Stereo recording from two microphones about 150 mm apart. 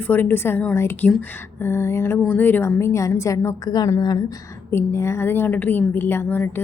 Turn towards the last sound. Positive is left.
turn(degrees=15)  # may be behind; listen again after turning